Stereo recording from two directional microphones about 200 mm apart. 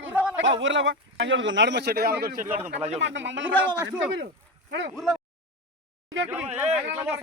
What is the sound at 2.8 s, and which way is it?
Speech, 35° right (ahead or behind).